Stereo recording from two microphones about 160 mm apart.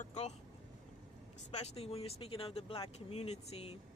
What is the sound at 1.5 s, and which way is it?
Speech, 40° left (ahead or behind).